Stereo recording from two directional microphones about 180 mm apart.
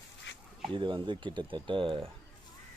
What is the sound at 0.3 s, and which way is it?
Duck, 90° left.